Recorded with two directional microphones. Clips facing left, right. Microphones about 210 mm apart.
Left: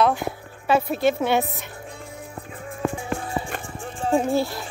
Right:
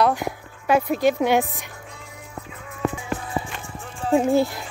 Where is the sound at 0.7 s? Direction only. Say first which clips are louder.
Right 1 dB; 15° right (ahead or behind).